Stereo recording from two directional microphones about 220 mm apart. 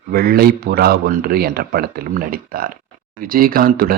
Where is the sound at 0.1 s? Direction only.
45° right (ahead or behind).